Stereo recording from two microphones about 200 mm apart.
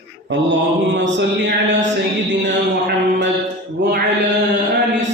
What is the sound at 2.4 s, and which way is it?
Mantra, 60° right (ahead or behind).